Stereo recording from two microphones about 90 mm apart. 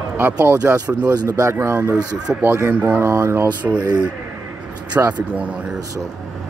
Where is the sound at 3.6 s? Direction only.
15° right (ahead or behind).